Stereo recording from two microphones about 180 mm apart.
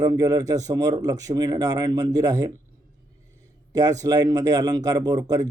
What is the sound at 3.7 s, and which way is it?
Speech, 20° right (ahead or behind).